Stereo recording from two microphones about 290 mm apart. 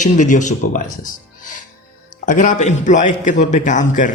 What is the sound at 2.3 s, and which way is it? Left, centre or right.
Speech, left.